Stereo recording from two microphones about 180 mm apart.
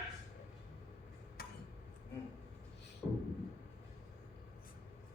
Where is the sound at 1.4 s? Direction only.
55° left (ahead or behind).